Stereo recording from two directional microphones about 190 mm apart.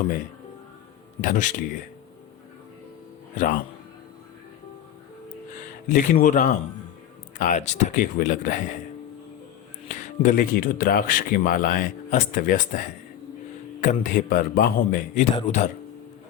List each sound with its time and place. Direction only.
1.2 s speech: 45° left (ahead or behind)
3.3 s speech: 45° left (ahead or behind)
5.9 s speech: 45° left (ahead or behind)
9.9 s speech: 45° left (ahead or behind)
13.8 s speech: 40° left (ahead or behind)